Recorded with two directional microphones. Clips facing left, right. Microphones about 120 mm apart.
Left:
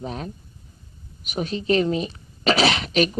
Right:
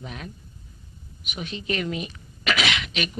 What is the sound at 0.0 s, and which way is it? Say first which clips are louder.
Speech: left 6 dB; 35° left (ahead or behind).